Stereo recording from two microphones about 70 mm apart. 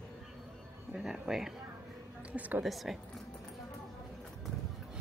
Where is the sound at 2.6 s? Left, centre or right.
Centre.